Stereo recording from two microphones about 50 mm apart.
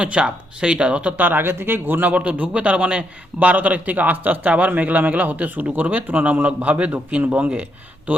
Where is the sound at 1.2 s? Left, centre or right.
Right.